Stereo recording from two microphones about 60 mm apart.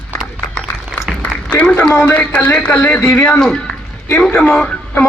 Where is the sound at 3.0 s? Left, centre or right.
Centre.